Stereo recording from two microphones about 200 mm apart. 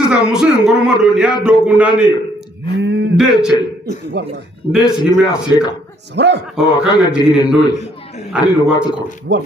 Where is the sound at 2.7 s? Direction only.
60° right (ahead or behind).